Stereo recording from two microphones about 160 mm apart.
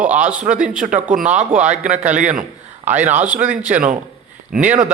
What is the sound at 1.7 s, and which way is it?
Speech, 50° right (ahead or behind).